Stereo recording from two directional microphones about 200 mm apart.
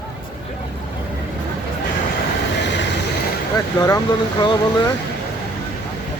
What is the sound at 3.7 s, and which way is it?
Speech, 20° left (ahead or behind).